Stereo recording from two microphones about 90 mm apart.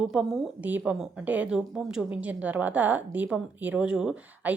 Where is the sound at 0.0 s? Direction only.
5° right (ahead or behind).